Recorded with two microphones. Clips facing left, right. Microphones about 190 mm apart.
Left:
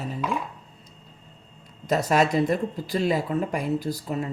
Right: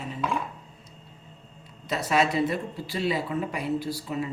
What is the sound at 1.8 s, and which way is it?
Speech, 45° left (ahead or behind).